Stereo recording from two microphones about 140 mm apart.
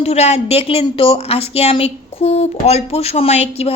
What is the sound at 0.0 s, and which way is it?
A woman's voice, 50° left (ahead or behind).